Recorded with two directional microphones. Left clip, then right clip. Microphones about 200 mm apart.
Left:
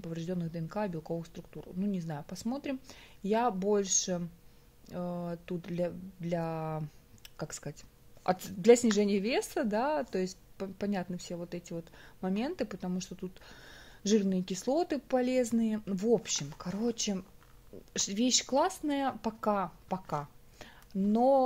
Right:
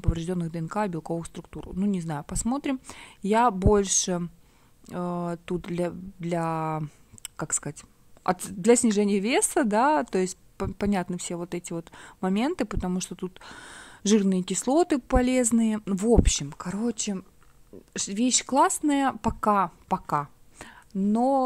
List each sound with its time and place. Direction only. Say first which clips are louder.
0.0 s speech: right 7 dB; 45° right (ahead or behind); by 21.4 s 30° right (ahead or behind)